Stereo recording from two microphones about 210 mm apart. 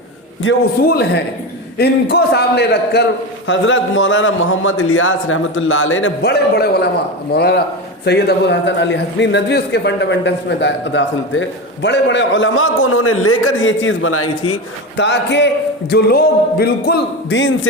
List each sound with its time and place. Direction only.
0.8 s a man's voice: 50° left (ahead or behind)
3.4 s a man's voice: 65° left (ahead or behind); by 14.5 s 90° left
14.9 s a man's voice: 55° left (ahead or behind)